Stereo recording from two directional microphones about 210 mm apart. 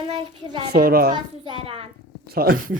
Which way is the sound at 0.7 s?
45° right (ahead or behind).